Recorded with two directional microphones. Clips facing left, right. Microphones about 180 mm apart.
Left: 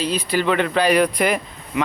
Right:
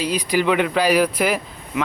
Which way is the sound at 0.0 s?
10° right (ahead or behind).